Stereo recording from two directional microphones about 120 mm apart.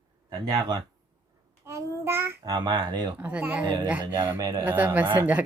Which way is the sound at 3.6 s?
40° right (ahead or behind).